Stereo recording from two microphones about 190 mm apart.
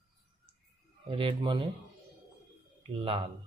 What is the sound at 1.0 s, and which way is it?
Speech, 30° right (ahead or behind).